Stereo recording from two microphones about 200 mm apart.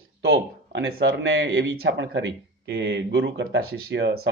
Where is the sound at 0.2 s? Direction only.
60° right (ahead or behind).